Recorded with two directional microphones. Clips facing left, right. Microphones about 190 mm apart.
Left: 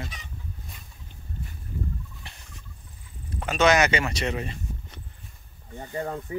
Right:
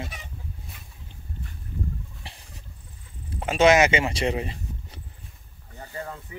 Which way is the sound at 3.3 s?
30° right (ahead or behind).